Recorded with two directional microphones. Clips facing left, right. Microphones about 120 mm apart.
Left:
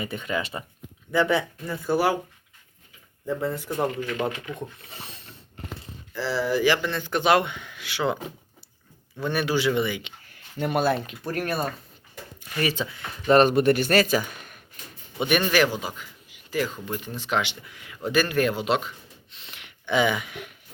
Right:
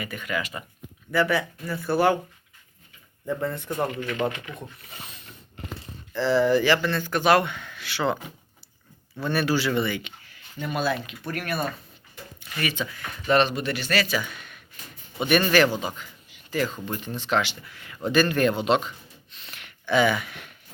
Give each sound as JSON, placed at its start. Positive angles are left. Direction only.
{"t": 0.0, "sound": "a man's voice", "side_deg": 30}
{"t": 3.2, "sound": "a man's voice", "side_deg": 5}
{"t": 4.9, "sound": "a sound", "side_deg": 30}
{"t": 6.1, "sound": "a man's voice", "side_deg": 5}
{"t": 9.2, "sound": "a man's voice", "side_deg": 15}
{"t": 10.3, "sound": "a sound", "side_deg": 60}
{"t": 10.9, "sound": "speech", "side_deg": 35}
{"t": 13.5, "sound": "speech", "side_deg": 50}
{"t": 15.2, "sound": "a man's voice", "side_deg": 10}
{"t": 19.3, "sound": "a sound", "side_deg": 20}